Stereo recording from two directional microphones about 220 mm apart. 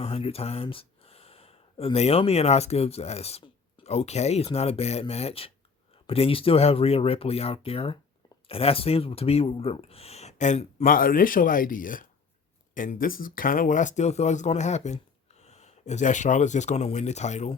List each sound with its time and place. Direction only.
0.0 s speech: 25° left (ahead or behind)